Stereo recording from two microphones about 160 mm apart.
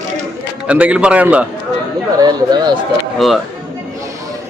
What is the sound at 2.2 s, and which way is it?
Speech, 25° right (ahead or behind).